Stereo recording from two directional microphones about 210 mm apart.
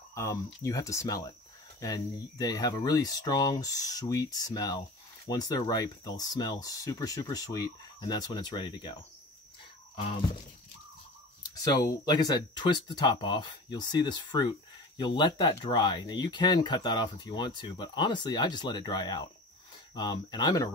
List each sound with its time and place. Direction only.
0.1 s speech: 15° left (ahead or behind)
11.5 s speech: 15° left (ahead or behind)